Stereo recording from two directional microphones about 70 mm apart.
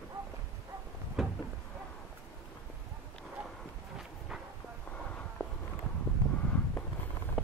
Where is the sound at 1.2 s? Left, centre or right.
Centre.